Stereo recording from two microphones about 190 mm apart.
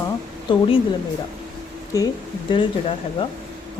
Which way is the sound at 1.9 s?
15° left (ahead or behind).